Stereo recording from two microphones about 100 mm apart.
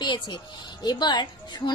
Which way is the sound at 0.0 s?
50° left (ahead or behind).